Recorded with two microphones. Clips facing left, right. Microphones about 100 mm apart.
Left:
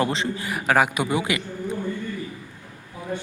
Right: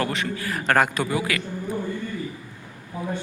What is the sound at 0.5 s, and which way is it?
Speech, 5° left (ahead or behind).